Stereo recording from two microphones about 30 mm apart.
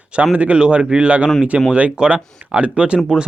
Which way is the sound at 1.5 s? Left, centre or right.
Right.